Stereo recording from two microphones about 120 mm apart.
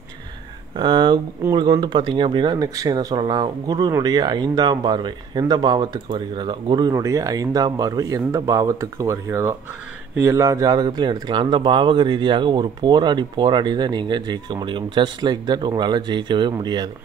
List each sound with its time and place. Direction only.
0.7 s speech: 45° right (ahead or behind)